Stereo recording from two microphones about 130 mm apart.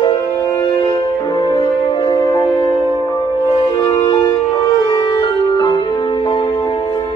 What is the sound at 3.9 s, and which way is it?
Music, 30° left (ahead or behind).